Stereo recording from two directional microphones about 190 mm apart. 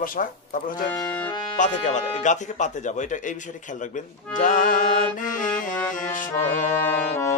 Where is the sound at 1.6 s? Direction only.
40° left (ahead or behind).